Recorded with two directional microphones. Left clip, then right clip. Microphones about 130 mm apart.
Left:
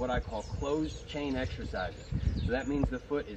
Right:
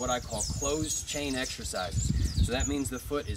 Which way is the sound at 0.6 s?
35° right (ahead or behind).